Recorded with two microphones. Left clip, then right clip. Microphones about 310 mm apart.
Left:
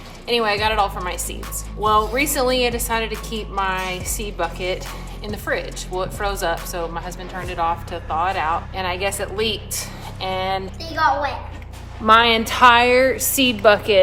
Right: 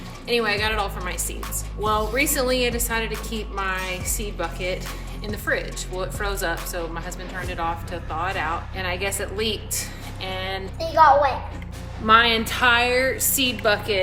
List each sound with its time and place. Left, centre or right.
0.3 s speech: centre
10.8 s speech: centre
12.0 s a woman's voice: centre